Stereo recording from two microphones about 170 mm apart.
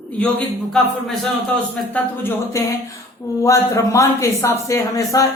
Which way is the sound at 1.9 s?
15° left (ahead or behind).